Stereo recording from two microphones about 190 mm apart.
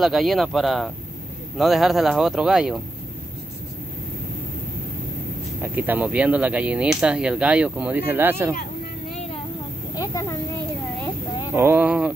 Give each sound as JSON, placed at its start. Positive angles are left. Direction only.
{"t": 0.0, "sound": "speech", "side_deg": 0}
{"t": 5.6, "sound": "speech", "side_deg": -10}
{"t": 9.9, "sound": "a sound", "side_deg": 15}
{"t": 11.5, "sound": "speech", "side_deg": -10}